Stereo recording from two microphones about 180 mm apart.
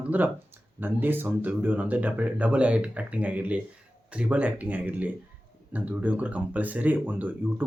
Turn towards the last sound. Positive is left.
turn(degrees=-10)  # may be behind; listen again after turning